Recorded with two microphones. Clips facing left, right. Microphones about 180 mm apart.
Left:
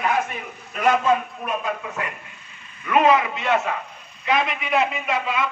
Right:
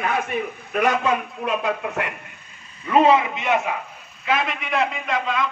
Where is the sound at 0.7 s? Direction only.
65° right (ahead or behind).